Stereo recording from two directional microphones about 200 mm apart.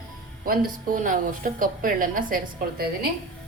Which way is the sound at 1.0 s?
45° right (ahead or behind).